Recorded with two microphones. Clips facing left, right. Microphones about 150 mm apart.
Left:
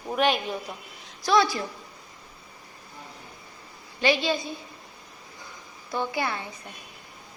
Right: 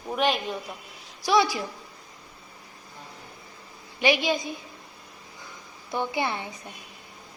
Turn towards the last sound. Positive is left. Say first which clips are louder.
# right 1 dB
turn(degrees=-20)  # may be behind; listen again after turning